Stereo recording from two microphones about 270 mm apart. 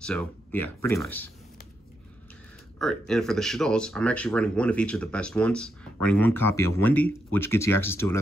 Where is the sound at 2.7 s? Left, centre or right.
Centre.